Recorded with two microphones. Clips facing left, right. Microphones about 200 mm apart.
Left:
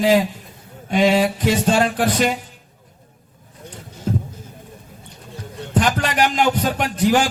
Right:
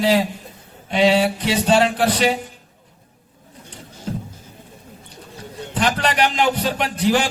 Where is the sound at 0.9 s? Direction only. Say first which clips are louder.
Even; 45° left (ahead or behind).